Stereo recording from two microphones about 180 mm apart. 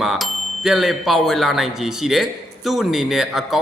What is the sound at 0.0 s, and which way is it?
Speech, centre (ahead or behind).